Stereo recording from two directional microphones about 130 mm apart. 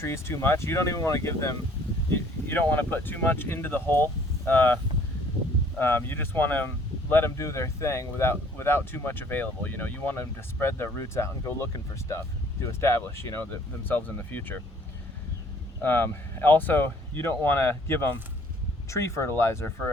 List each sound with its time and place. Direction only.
0.0 s speech: 20° left (ahead or behind)
5.8 s speech: 15° left (ahead or behind)
15.8 s speech: 15° left (ahead or behind)